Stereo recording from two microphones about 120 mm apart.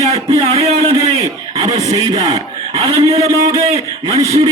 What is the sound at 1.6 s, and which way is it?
Music, 30° right (ahead or behind).